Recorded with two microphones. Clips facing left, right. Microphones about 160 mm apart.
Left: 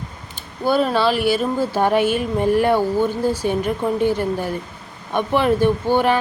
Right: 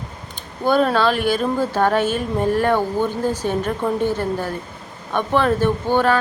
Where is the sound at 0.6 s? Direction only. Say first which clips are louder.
Right 1 dB; 5° left (ahead or behind).